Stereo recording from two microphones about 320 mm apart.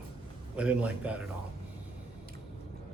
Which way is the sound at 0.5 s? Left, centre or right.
Centre.